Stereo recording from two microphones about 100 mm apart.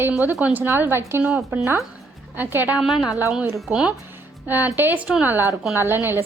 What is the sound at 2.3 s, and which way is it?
Speech, 20° right (ahead or behind).